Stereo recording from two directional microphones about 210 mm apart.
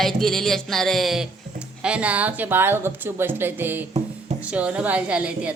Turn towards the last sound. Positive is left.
turn(degrees=-5)  # may be behind; listen again after turning